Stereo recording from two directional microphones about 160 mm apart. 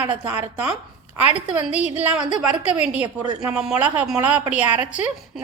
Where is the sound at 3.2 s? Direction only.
25° right (ahead or behind).